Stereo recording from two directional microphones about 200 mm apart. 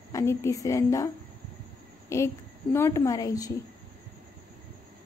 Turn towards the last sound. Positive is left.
turn(degrees=20)  # may be behind; listen again after turning